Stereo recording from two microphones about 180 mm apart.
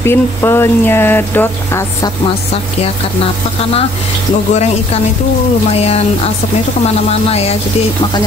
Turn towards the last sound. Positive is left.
turn(degrees=35)  # may be behind; listen again after turning